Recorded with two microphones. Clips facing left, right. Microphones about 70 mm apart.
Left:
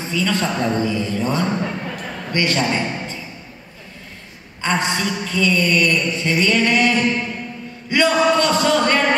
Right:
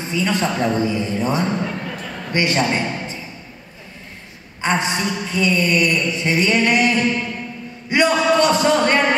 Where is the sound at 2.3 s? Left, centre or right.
Centre.